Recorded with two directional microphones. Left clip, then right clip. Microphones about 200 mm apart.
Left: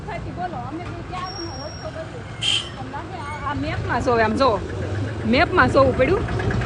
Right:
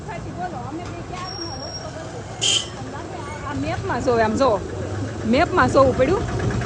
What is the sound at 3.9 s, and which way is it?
Speech, centre (ahead or behind).